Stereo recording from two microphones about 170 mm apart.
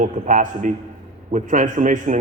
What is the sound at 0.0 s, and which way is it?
A man's voice, 50° right (ahead or behind).